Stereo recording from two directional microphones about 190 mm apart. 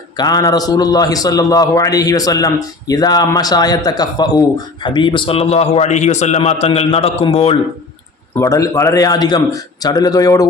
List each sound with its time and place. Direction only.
0.2 s a man's voice: 20° left (ahead or behind)
8.4 s a man's voice: 15° left (ahead or behind)